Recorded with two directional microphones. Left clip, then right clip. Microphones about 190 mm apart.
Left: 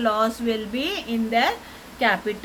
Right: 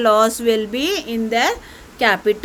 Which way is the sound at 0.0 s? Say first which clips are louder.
Right 8 dB; 70° right (ahead or behind).